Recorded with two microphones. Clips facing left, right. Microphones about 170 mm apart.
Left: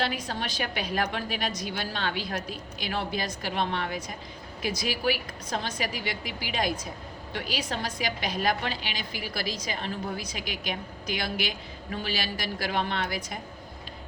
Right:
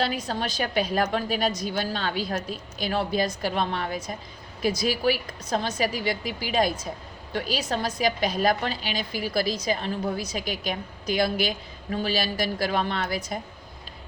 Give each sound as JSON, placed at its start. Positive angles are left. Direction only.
{"t": 0.0, "sound": "a woman's voice", "side_deg": -40}